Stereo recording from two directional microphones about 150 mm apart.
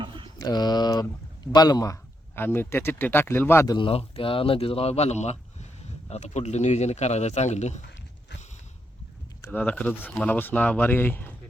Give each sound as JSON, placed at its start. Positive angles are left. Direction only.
{"t": 0.3, "sound": "speech", "side_deg": 30}
{"t": 3.8, "sound": "speech", "side_deg": 40}
{"t": 9.4, "sound": "speech", "side_deg": 10}